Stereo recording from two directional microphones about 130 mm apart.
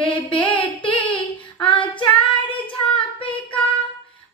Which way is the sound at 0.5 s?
40° left (ahead or behind).